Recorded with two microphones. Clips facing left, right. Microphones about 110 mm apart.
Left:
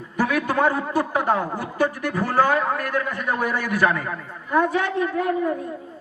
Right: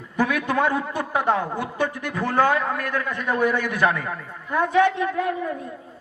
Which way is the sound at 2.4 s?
35° left (ahead or behind).